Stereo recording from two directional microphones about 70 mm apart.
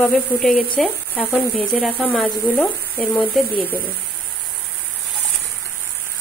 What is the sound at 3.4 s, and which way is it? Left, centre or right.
Speech, centre.